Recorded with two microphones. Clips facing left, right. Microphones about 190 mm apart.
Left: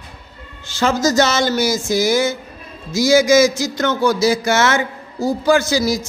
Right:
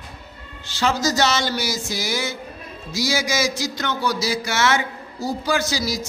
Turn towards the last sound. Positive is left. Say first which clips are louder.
# left 7 dB
turn(degrees=50)  # may be behind; listen again after turning